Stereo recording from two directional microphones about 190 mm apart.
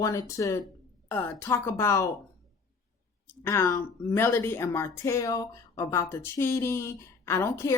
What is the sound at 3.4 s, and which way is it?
A woman's voice, 15° left (ahead or behind).